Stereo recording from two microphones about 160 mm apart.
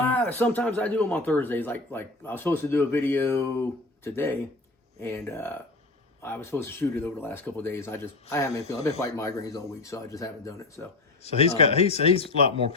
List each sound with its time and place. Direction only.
0.1 s speech: 10° left (ahead or behind)
11.2 s speech: 40° left (ahead or behind)